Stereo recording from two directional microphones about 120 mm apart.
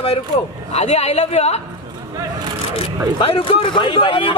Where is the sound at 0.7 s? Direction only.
60° left (ahead or behind).